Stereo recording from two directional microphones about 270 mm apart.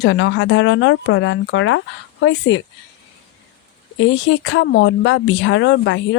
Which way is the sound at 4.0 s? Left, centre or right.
Left.